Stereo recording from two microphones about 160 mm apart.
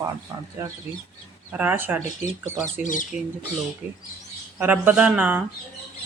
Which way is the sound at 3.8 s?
10° right (ahead or behind).